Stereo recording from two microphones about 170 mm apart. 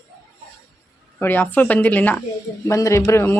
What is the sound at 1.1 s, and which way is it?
Speech, 10° left (ahead or behind).